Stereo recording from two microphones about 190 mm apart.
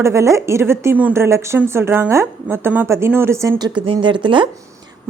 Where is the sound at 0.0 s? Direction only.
15° right (ahead or behind).